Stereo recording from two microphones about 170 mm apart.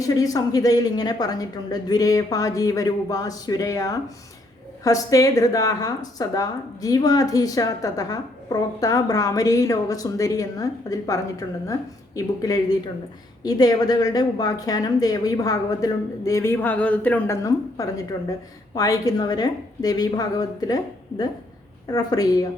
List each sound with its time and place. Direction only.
0.0 s a woman's voice: 20° left (ahead or behind)